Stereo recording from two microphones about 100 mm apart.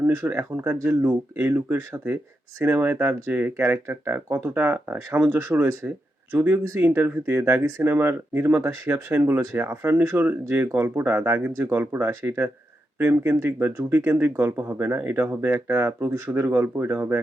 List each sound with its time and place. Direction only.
0.0 s speech: 20° right (ahead or behind)